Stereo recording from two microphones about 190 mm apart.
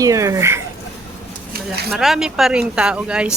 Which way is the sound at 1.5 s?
55° right (ahead or behind).